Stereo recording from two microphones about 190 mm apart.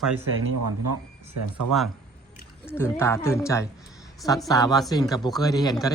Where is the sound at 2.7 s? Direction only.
10° left (ahead or behind).